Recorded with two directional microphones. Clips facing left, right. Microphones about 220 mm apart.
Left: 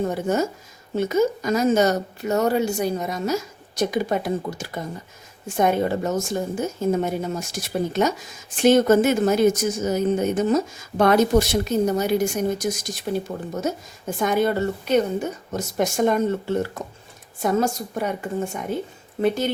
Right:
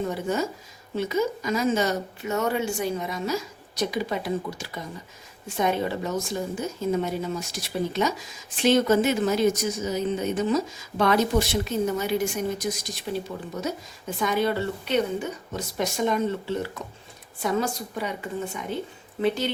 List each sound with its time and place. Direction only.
0.1 s a woman's voice: 45° left (ahead or behind)